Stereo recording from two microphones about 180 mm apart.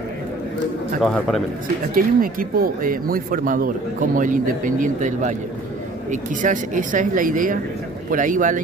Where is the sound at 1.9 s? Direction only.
50° right (ahead or behind).